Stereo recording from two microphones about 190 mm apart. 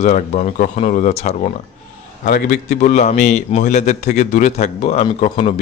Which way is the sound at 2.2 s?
50° left (ahead or behind).